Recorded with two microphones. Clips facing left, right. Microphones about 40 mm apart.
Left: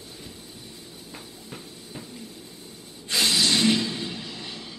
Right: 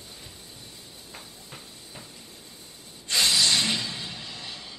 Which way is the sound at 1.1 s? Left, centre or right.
Centre.